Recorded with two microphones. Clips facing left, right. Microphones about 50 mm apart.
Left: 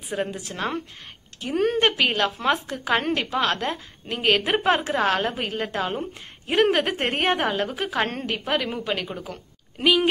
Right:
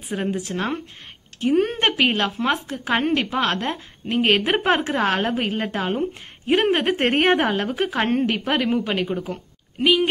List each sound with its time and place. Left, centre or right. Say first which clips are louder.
0.3 s a woman's voice: right 4 dB; right
2.9 s speech: right 2 dB; right
3.3 s a woman's voice: right 1 dB; right
6.9 s a woman's voice: right 5 dB; right
9.8 s speech: right 2 dB; centre